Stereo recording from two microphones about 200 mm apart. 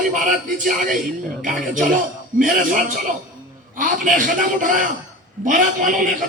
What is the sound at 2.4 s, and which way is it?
A man's voice, 40° right (ahead or behind).